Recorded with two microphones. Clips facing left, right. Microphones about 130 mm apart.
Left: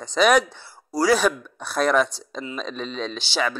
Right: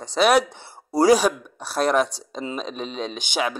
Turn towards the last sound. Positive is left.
turn(degrees=-10)  # may be behind; listen again after turning